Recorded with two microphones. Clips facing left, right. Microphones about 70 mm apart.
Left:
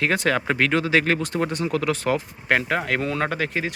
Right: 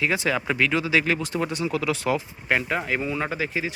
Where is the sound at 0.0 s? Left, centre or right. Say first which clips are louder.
Left 2 dB; left.